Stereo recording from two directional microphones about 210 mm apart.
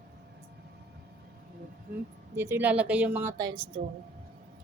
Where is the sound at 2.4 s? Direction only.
10° right (ahead or behind).